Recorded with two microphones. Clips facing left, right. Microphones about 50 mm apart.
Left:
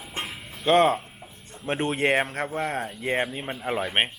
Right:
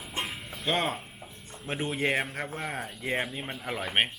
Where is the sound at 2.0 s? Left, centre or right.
Centre.